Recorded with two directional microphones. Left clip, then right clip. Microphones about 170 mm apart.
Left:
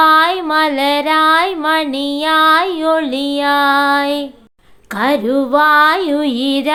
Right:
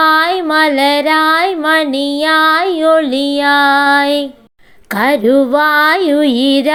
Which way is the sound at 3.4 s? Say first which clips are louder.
Right 2 dB; 20° right (ahead or behind).